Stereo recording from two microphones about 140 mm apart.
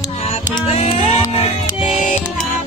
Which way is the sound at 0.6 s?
45° left (ahead or behind).